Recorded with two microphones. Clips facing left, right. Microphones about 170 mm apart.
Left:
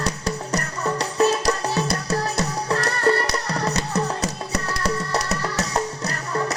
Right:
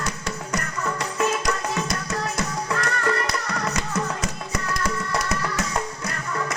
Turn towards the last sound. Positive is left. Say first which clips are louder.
# left 3 dB
turn(degrees=35)  # may be behind; listen again after turning